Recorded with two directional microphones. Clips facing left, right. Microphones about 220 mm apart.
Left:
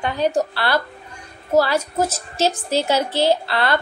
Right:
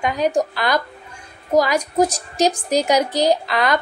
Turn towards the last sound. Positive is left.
turn(degrees=-15)  # may be behind; listen again after turning